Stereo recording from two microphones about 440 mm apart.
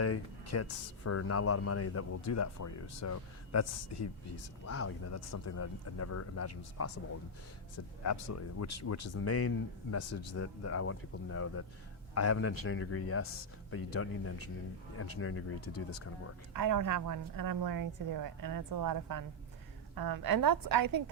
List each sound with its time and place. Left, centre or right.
0.0 s speech: left
8.0 s speech: left
16.6 s a woman's voice: right